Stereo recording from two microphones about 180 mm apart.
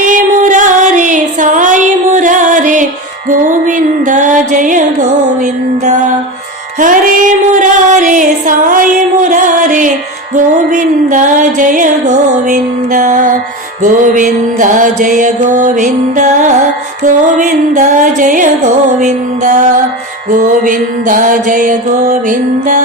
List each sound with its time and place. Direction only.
0.0 s music: 45° right (ahead or behind)